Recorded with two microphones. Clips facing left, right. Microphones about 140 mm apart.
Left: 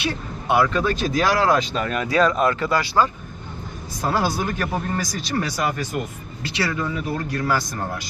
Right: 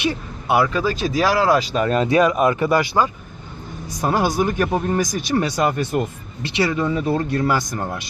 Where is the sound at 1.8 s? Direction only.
25° right (ahead or behind).